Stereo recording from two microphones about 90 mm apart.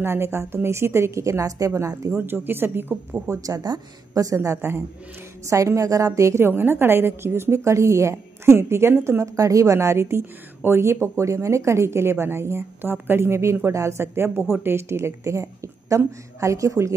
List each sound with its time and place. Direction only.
0.0 s speech: 30° right (ahead or behind)
2.2 s a woman's voice: 25° right (ahead or behind)
3.3 s speech: 40° right (ahead or behind)
9.2 s speech: 35° right (ahead or behind)